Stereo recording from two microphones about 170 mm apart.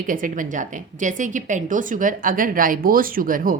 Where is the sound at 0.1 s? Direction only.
50° right (ahead or behind).